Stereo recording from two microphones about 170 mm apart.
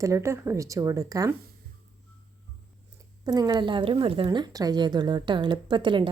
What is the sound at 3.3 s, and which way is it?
A woman's voice, 25° right (ahead or behind).